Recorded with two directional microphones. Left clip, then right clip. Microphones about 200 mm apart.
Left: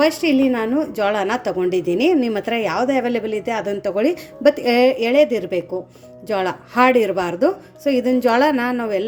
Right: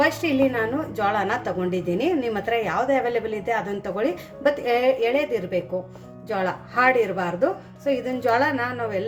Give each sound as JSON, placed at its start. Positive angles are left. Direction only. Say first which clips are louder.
{"t": 0.0, "sound": "a woman's voice", "louder": "left 4 dB", "side_deg": 40}